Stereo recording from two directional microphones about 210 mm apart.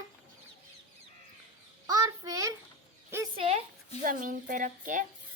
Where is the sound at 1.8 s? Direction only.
15° right (ahead or behind).